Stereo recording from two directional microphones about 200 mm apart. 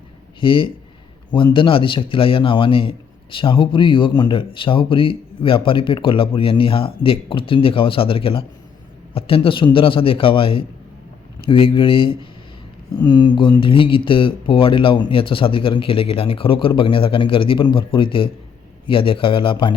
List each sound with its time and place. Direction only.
0.3 s speech: 25° left (ahead or behind)